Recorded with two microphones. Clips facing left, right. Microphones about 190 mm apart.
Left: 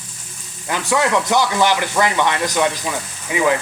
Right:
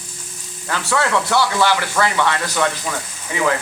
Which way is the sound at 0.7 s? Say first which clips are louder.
Left 2 dB; 15° left (ahead or behind).